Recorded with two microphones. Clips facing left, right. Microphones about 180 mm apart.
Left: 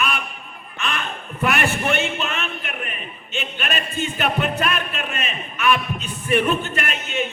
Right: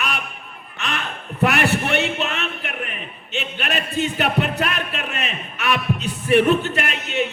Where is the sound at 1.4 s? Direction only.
65° right (ahead or behind).